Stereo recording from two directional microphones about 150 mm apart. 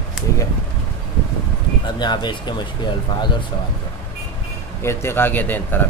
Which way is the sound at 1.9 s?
30° left (ahead or behind).